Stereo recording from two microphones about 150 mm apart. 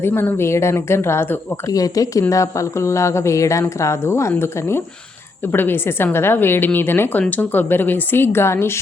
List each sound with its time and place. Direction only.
0.0 s a woman's voice: 15° left (ahead or behind)